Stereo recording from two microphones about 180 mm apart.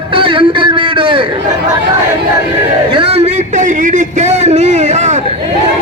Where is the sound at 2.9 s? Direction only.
30° right (ahead or behind).